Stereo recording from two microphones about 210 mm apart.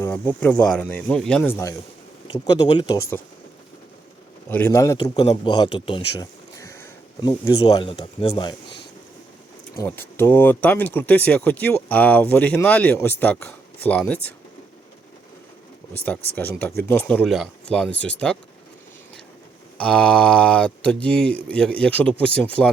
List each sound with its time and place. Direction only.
0.0 s speech: 10° left (ahead or behind)
4.4 s a man's voice: 10° left (ahead or behind)
9.7 s speech: 10° left (ahead or behind)
16.0 s speech: 10° left (ahead or behind)
19.8 s speech: 5° left (ahead or behind)